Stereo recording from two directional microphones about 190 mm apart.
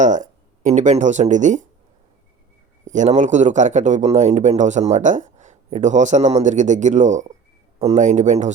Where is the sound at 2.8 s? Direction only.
40° right (ahead or behind).